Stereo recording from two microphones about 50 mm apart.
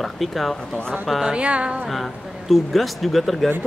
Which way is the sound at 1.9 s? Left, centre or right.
Centre.